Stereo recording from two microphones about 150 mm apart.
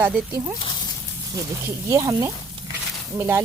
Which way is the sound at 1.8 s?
20° right (ahead or behind).